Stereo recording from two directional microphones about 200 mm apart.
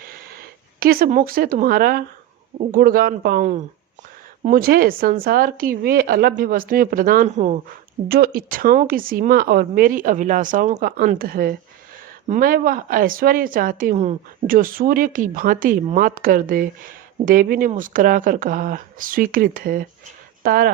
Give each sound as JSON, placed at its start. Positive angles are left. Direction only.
{"t": 0.8, "sound": "speech", "side_deg": -50}
{"t": 8.0, "sound": "speech", "side_deg": -50}